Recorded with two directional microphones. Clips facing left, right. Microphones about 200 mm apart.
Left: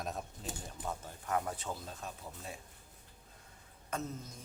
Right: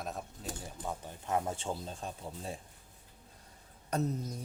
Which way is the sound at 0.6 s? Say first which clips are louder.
Right 1 dB; 15° right (ahead or behind).